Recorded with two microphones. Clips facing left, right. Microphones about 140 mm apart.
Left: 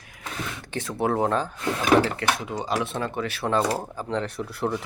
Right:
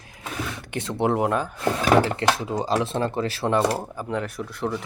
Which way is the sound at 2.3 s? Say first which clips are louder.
Right 3 dB; 30° right (ahead or behind).